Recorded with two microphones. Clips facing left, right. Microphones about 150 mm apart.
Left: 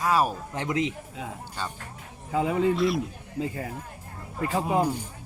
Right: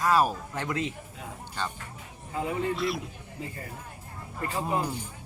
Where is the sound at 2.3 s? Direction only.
90° left.